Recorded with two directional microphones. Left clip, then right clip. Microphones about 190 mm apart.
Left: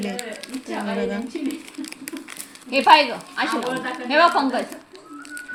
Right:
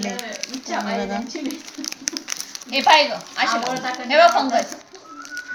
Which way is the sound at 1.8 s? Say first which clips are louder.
Right 5 dB; 35° right (ahead or behind).